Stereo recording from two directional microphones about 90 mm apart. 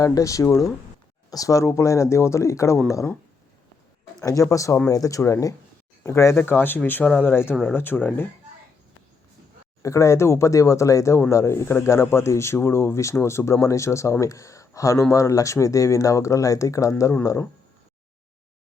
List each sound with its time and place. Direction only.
0.0 s speech: 40° left (ahead or behind)
4.2 s speech: 40° left (ahead or behind); by 8.3 s 20° left (ahead or behind)
9.8 s speech: 35° left (ahead or behind)